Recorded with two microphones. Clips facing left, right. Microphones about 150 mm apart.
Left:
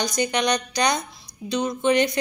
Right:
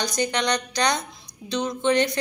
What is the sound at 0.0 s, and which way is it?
Music, 15° left (ahead or behind).